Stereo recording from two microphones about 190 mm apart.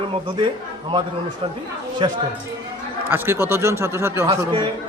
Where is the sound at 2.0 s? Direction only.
25° right (ahead or behind).